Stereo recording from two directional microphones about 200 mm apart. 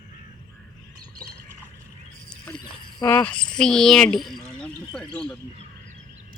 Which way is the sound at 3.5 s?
5° left (ahead or behind).